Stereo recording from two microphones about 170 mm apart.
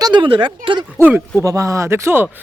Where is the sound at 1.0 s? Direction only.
15° right (ahead or behind).